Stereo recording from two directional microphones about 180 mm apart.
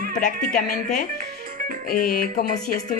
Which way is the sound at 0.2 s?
50° left (ahead or behind).